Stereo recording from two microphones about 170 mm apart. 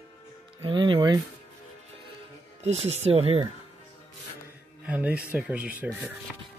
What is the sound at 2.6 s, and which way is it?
Speech, 40° right (ahead or behind).